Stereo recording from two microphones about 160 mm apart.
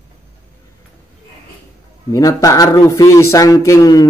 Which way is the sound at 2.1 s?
20° left (ahead or behind).